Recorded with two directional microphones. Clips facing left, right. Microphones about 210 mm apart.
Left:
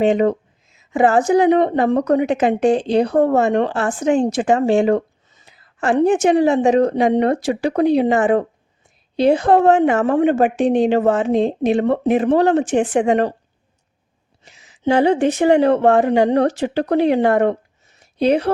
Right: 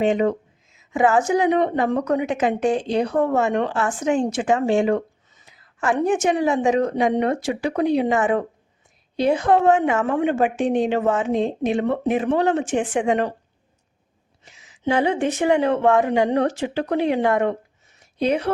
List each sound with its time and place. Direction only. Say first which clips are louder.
0.0 s a woman's voice: left 4 dB; 35° left (ahead or behind)
14.4 s a woman's voice: left 5 dB; 35° left (ahead or behind)
18.0 s a sound: left 5 dB; 35° left (ahead or behind)